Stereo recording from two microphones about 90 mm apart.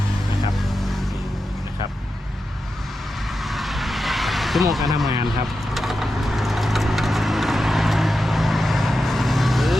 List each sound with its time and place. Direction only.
3.4 s vehicle: centre (ahead or behind)